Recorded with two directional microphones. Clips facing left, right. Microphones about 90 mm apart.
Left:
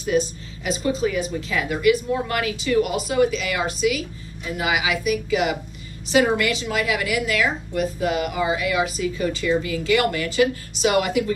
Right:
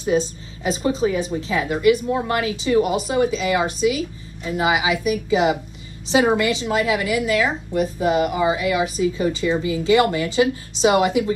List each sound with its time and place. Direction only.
0.0 s a woman's voice: 25° right (ahead or behind)